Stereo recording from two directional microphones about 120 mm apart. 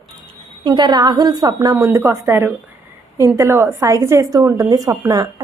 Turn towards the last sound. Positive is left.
turn(degrees=-30)  # may be behind; listen again after turning